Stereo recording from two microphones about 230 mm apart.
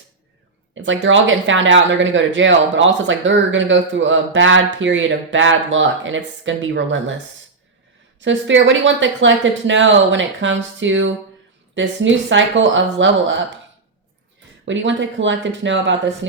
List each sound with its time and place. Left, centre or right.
0.7 s speech: right
8.2 s speech: right
14.6 s speech: right